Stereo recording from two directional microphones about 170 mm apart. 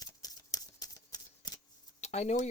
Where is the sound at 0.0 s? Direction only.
20° left (ahead or behind).